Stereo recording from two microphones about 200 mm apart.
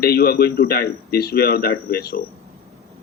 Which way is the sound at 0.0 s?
50° left (ahead or behind).